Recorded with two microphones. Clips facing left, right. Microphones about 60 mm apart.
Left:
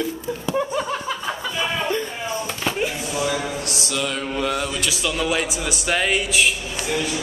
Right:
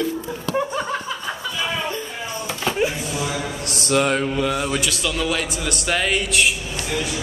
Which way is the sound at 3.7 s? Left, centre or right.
Right.